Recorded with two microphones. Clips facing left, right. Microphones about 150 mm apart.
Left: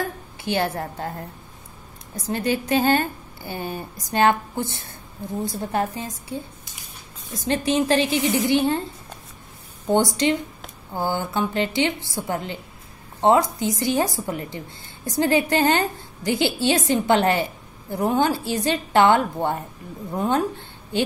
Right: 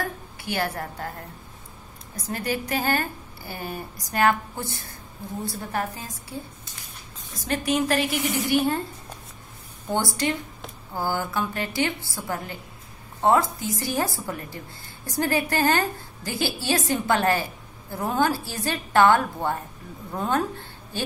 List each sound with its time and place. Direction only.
0.4 s a woman's voice: 25° left (ahead or behind)
2.2 s a woman's voice: 25° left (ahead or behind)
7.4 s a woman's voice: 25° left (ahead or behind)
9.8 s a woman's voice: 20° left (ahead or behind)